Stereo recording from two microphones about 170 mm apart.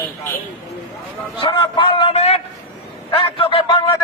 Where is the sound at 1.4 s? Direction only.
30° left (ahead or behind).